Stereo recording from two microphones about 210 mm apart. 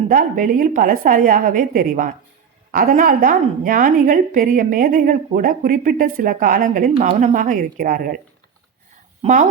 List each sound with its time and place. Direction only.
0.1 s a woman's voice: 40° right (ahead or behind)
9.2 s a woman's voice: 35° right (ahead or behind)